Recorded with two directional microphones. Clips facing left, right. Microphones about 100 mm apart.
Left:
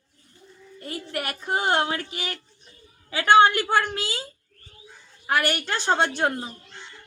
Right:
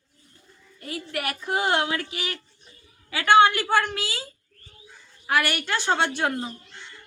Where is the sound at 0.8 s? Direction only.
35° left (ahead or behind).